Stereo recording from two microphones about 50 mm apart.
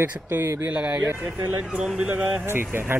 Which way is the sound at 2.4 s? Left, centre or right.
Right.